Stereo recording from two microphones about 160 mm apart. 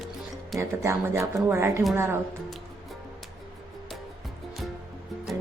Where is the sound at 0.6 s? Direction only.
15° right (ahead or behind).